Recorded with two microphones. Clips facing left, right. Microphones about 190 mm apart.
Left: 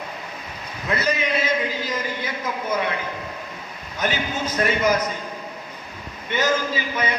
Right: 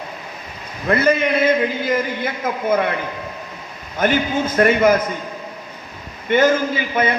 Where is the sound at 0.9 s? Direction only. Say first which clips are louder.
Right 7 dB; 55° right (ahead or behind).